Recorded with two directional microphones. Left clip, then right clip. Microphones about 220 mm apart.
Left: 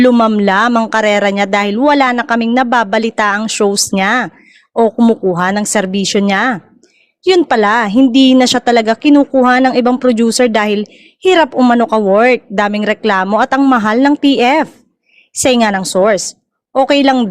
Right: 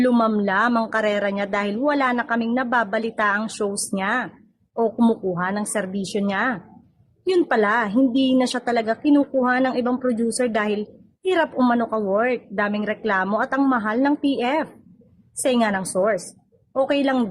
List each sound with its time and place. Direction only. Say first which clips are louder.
0.0 s speech: left 10 dB; 35° left (ahead or behind)